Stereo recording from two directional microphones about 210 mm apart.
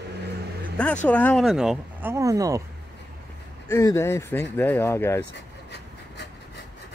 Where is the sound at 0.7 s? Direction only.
5° left (ahead or behind).